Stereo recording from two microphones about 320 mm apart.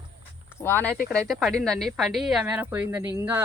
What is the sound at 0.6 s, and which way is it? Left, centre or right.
Speech, centre.